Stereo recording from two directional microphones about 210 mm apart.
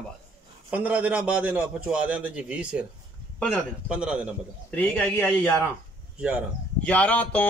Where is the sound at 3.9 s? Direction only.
5° right (ahead or behind).